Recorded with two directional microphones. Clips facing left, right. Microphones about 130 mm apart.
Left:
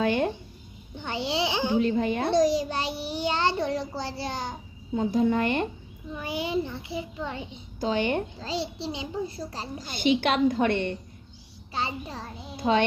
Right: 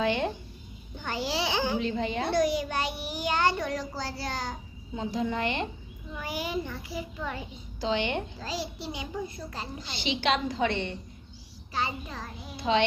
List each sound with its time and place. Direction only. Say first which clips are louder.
0.0 s speech: left 3 dB; 45° left (ahead or behind)
0.9 s a child's voice: left 2 dB; 20° left (ahead or behind)
1.8 s a woman's voice: left 5 dB; 50° left (ahead or behind)
2.3 s a child's voice: left 4 dB; 35° left (ahead or behind)
4.9 s a woman's voice: left 7 dB; 45° left (ahead or behind)
6.1 s a child's voice: left 4 dB; 20° left (ahead or behind)
7.8 s a woman's voice: left 3 dB; 45° left (ahead or behind)
8.4 s a child's voice: left 3 dB; 25° left (ahead or behind); by 10.9 s 55° left (ahead or behind)
11.7 s a child's voice: left 1 dB; 30° left (ahead or behind)
12.5 s a woman's voice: left 2 dB; 45° left (ahead or behind)